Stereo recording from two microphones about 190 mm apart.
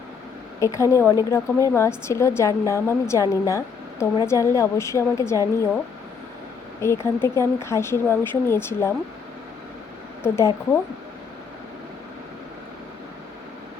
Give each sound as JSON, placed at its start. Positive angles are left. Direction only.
{"t": 0.6, "sound": "a woman's voice", "side_deg": 15}
{"t": 6.8, "sound": "a woman's voice", "side_deg": 15}
{"t": 10.2, "sound": "a woman's voice", "side_deg": 15}